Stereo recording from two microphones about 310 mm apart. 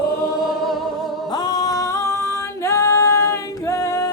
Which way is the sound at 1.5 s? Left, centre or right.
Centre.